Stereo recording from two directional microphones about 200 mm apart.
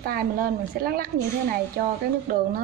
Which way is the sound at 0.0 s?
50° right (ahead or behind).